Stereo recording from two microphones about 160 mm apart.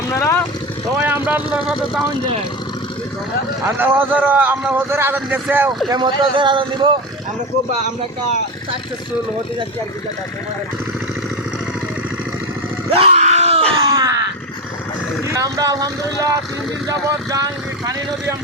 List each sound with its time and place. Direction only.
0.1 s vehicle: 20° left (ahead or behind)
0.9 s speech: 10° right (ahead or behind)
3.8 s speech: 10° right (ahead or behind)
5.9 s speech: 30° right (ahead or behind)
12.9 s screaming: 40° right (ahead or behind)
13.9 s a sound: 25° right (ahead or behind)
15.3 s speech: 20° right (ahead or behind)